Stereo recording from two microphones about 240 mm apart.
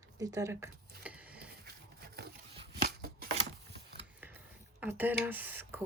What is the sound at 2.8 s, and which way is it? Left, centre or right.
Shuffling cards, right.